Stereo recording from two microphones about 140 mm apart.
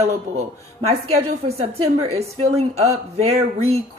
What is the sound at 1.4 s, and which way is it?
A woman's voice, 45° right (ahead or behind).